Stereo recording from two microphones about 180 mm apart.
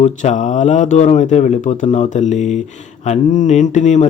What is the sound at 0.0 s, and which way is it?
Speech, 40° left (ahead or behind).